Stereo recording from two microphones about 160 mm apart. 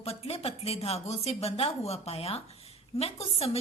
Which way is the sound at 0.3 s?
40° left (ahead or behind).